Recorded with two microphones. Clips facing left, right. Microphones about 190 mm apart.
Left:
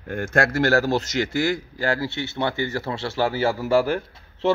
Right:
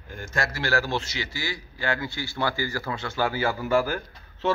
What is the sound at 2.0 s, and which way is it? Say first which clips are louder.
A man's voice: left 3 dB; 25° left (ahead or behind).